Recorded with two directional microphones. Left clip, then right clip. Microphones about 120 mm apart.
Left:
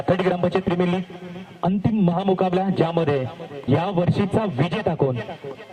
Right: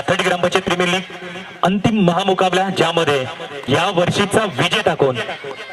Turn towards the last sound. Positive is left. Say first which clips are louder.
# right 7 dB
turn(degrees=-20)  # may be behind; listen again after turning